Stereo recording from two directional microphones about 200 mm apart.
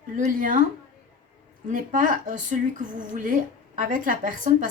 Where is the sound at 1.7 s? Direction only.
40° right (ahead or behind).